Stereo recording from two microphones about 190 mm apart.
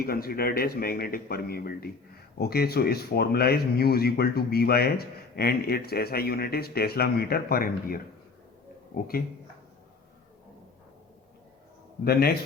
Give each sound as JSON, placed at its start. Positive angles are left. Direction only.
{"t": 0.0, "sound": "speech", "side_deg": 55}